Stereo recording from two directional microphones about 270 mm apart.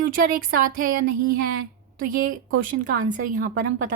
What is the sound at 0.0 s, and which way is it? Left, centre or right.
Speech, right.